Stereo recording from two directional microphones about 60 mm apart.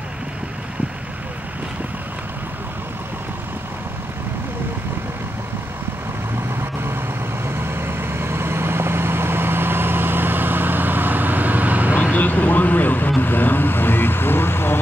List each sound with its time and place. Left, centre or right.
7.4 s vehicle: right
12.0 s vehicle: left